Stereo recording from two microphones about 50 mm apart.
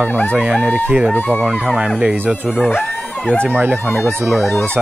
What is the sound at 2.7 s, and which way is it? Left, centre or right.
Speech, left.